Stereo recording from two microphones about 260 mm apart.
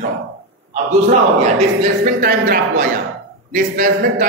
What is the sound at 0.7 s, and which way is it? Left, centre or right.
A man's voice, right.